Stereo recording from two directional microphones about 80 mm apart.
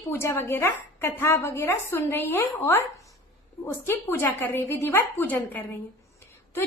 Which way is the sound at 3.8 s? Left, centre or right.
Left.